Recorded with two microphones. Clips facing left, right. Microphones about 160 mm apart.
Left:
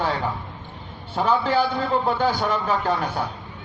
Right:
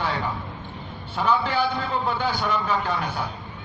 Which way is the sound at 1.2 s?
35° left (ahead or behind).